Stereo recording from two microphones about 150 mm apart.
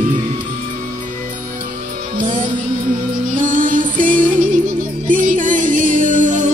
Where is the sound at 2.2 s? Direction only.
60° right (ahead or behind).